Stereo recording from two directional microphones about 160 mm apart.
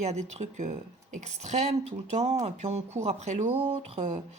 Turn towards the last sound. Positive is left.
turn(degrees=-40)  # may be behind; listen again after turning